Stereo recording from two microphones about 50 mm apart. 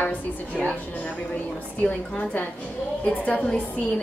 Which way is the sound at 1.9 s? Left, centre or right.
Left.